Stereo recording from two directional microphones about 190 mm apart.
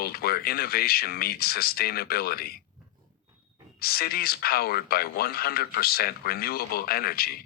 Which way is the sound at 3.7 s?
55° left (ahead or behind).